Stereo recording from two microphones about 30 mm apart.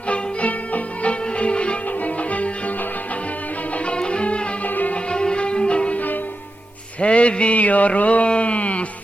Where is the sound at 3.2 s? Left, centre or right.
Left.